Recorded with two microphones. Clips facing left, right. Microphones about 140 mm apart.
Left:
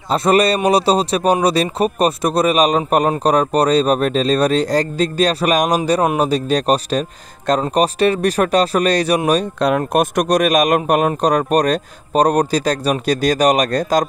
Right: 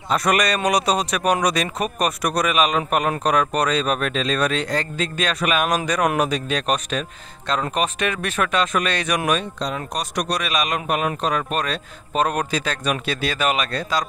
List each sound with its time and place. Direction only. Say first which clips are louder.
0.1 s speech: left 6 dB; 30° left (ahead or behind)
9.6 s a man's voice: left 11 dB; 60° left (ahead or behind)